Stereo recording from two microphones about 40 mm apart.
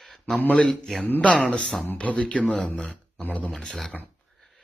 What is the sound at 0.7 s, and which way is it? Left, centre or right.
Speech, centre.